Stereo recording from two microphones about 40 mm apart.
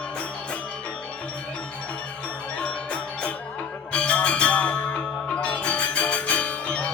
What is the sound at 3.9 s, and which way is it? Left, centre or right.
Music, left.